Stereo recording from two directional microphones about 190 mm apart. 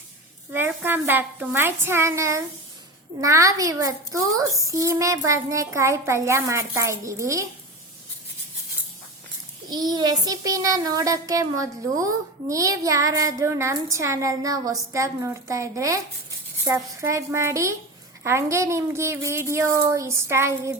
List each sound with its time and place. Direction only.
0.5 s a child's voice: 10° right (ahead or behind)
9.6 s a child's voice: 20° right (ahead or behind)